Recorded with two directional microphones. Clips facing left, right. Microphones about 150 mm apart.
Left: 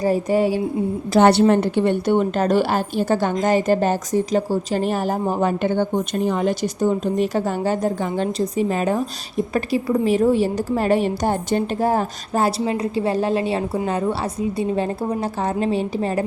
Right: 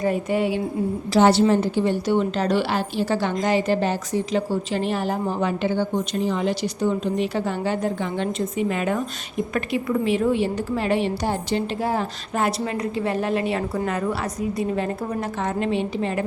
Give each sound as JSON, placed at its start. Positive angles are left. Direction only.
{"t": 0.0, "sound": "a woman's voice", "side_deg": 35}
{"t": 1.1, "sound": "a woman's voice", "side_deg": 60}